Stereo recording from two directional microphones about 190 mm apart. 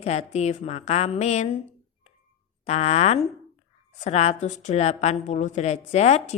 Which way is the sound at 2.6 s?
35° left (ahead or behind).